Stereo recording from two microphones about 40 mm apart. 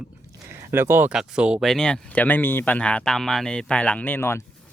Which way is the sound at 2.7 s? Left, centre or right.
Left.